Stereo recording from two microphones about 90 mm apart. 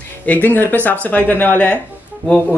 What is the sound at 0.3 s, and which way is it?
Speech, 20° left (ahead or behind).